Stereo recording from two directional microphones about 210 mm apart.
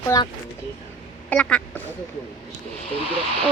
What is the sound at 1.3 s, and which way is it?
Quack, 5° left (ahead or behind).